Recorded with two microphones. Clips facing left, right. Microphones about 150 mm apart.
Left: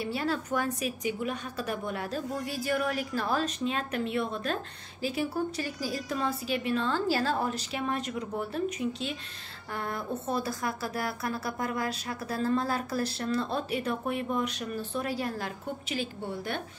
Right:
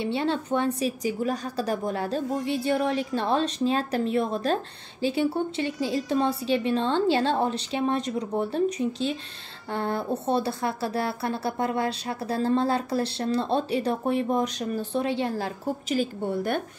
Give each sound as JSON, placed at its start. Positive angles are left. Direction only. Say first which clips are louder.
{"t": 0.0, "sound": "a woman's voice", "louder": "right 5 dB", "side_deg": -25}